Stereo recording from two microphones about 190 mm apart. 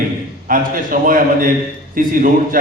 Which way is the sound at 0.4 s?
45° right (ahead or behind).